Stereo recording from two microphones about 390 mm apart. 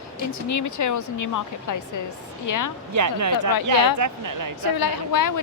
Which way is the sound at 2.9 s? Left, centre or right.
Right.